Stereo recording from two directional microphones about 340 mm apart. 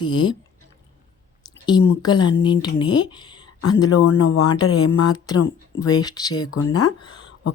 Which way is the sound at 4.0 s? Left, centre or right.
Left.